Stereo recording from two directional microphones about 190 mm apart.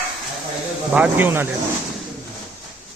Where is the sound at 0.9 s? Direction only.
10° right (ahead or behind).